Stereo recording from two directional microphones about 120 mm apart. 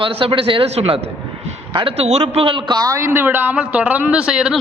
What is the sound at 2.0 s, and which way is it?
A man's voice, 60° right (ahead or behind).